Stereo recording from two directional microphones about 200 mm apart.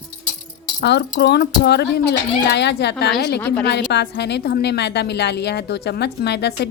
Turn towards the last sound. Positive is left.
turn(degrees=55)  # may be behind; listen again after turning